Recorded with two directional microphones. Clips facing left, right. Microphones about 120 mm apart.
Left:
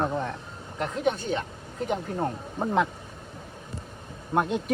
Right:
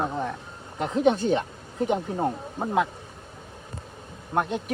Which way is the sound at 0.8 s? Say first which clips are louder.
Right 5 dB; 25° right (ahead or behind).